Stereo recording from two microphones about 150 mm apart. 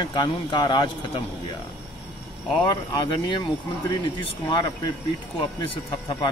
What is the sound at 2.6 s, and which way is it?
Speech, 30° left (ahead or behind).